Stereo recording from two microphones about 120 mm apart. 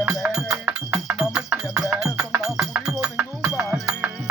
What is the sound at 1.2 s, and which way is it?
Music, 5° right (ahead or behind).